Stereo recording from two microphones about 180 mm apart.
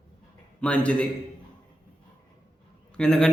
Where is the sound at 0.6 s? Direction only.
5° left (ahead or behind).